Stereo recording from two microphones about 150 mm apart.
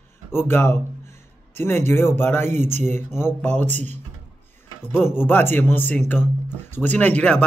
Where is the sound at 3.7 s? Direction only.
50° right (ahead or behind).